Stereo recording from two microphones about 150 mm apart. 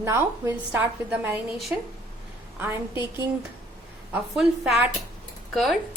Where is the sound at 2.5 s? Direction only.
15° right (ahead or behind).